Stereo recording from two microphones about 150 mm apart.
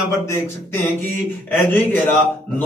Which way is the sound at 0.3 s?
15° left (ahead or behind).